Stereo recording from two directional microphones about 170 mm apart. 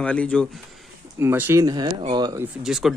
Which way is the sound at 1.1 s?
15° right (ahead or behind).